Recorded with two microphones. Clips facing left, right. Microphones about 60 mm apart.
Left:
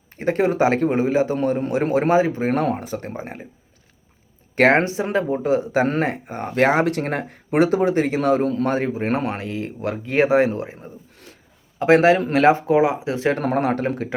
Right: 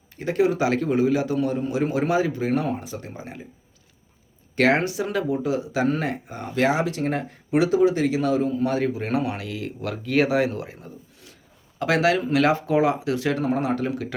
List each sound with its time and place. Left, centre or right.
0.2 s speech: left
2.5 s speech: left
4.5 s speech: left
8.6 s speech: left
13.4 s speech: left